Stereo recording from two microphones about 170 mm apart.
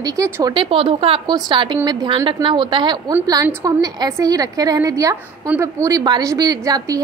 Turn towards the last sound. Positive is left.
turn(degrees=-20)  # may be behind; listen again after turning